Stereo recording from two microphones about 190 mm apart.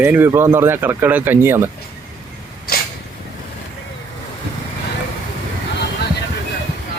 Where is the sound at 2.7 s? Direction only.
55° left (ahead or behind).